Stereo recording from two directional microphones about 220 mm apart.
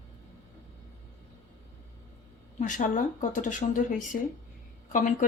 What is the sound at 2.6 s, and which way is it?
Speech, 35° left (ahead or behind).